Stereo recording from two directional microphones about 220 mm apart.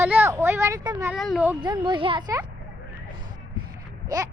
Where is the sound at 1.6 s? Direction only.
20° right (ahead or behind).